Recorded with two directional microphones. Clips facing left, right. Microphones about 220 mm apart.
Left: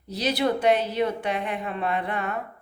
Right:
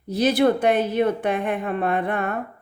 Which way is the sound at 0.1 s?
50° right (ahead or behind).